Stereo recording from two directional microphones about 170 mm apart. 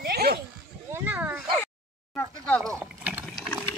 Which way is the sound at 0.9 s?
10° right (ahead or behind).